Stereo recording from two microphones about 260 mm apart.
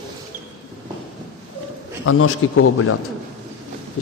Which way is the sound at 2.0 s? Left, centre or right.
Left.